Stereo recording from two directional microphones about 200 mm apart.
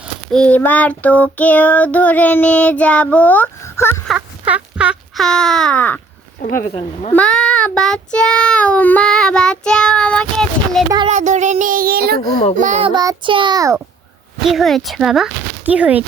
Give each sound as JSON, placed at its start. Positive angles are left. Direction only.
{"t": 0.0, "sound": "child singing", "side_deg": 5}
{"t": 4.1, "sound": "a sound", "side_deg": -5}
{"t": 6.4, "sound": "speech", "side_deg": 40}
{"t": 7.1, "sound": "child singing", "side_deg": 5}
{"t": 11.1, "sound": "child singing", "side_deg": -35}
{"t": 12.5, "sound": "child singing", "side_deg": -35}
{"t": 12.9, "sound": "a child's voice", "side_deg": -20}
{"t": 14.4, "sound": "child singing", "side_deg": 0}